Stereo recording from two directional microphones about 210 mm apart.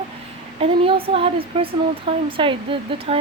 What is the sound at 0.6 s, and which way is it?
Speech, 25° right (ahead or behind).